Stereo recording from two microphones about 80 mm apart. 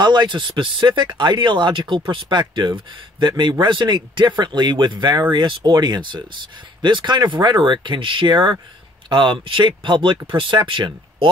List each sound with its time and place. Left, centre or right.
0.0 s speech: right